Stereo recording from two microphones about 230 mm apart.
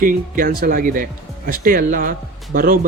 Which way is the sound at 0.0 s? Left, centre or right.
Right.